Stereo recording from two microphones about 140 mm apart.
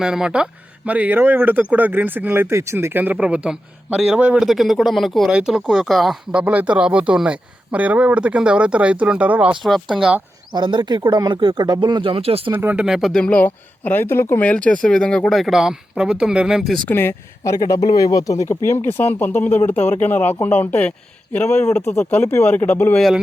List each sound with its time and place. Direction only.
0.0 s speech: 5° right (ahead or behind)
6.4 s speech: 10° right (ahead or behind)
10.5 s speech: 35° right (ahead or behind)
12.5 s speech: 15° right (ahead or behind)
16.9 s speech: 15° left (ahead or behind)